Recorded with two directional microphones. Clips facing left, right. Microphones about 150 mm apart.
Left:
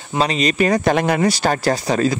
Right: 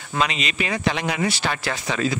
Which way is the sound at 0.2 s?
35° left (ahead or behind).